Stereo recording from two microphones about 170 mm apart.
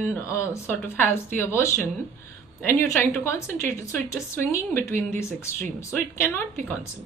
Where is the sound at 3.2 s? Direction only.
15° left (ahead or behind).